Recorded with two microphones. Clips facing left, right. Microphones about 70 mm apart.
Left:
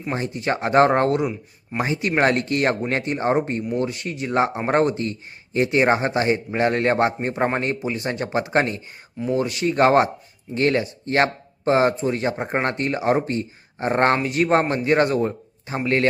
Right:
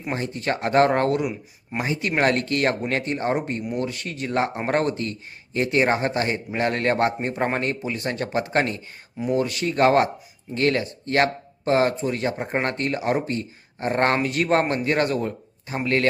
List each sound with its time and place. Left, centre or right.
0.2 s speech: left